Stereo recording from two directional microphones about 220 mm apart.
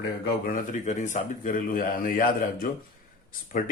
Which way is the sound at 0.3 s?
40° left (ahead or behind).